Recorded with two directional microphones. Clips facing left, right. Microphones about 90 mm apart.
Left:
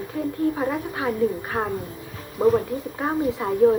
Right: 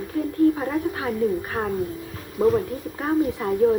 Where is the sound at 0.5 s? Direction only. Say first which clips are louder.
Right 1 dB; 15° left (ahead or behind).